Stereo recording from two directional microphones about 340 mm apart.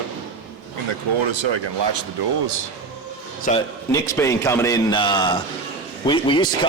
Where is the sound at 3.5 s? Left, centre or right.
Centre.